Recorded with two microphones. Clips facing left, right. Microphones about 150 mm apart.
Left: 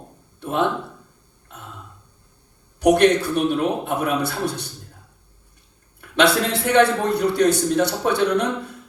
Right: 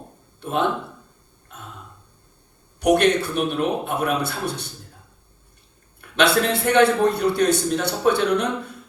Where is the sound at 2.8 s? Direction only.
60° right (ahead or behind).